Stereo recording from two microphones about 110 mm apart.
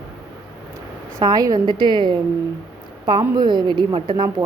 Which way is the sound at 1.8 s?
45° right (ahead or behind).